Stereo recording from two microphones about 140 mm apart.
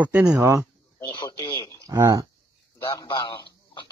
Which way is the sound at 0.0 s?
10° right (ahead or behind).